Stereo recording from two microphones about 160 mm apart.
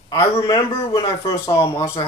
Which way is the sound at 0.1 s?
25° left (ahead or behind).